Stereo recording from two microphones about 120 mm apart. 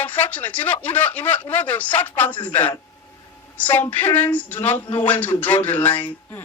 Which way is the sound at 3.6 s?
15° left (ahead or behind).